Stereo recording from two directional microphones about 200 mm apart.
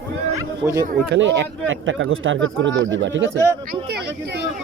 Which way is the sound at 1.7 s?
75° right (ahead or behind).